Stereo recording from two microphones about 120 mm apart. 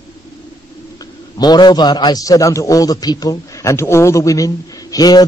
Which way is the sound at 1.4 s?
35° left (ahead or behind).